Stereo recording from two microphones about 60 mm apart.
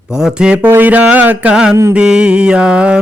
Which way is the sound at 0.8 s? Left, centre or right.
Right.